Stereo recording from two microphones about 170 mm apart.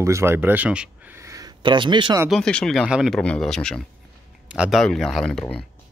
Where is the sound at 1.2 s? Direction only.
20° right (ahead or behind).